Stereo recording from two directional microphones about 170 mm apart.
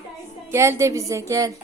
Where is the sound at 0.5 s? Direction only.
15° right (ahead or behind).